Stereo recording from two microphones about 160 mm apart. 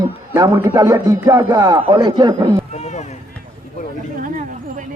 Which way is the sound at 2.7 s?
45° left (ahead or behind).